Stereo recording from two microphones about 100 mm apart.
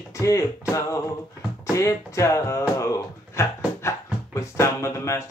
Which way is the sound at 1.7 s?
30° left (ahead or behind).